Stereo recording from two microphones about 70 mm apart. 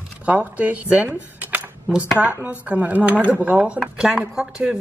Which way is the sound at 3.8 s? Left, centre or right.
Centre.